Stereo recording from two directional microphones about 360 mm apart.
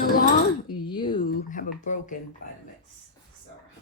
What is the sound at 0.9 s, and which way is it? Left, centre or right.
Speech, centre.